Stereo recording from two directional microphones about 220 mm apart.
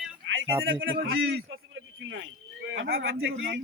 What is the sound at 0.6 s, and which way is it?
Speech, 60° right (ahead or behind).